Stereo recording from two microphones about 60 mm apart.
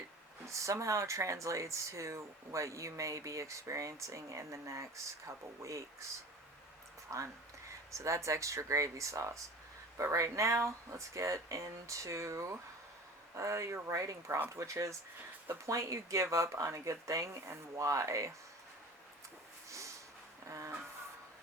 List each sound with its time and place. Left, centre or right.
0.4 s speech: right
7.1 s speech: right
20.5 s a sound: right